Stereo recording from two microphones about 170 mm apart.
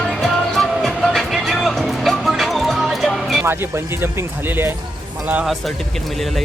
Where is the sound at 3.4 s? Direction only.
15° right (ahead or behind).